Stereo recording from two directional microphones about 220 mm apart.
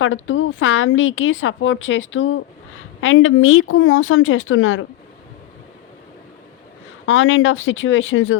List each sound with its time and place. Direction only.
0.0 s a woman's voice: 60° left (ahead or behind)
7.0 s speech: 65° left (ahead or behind)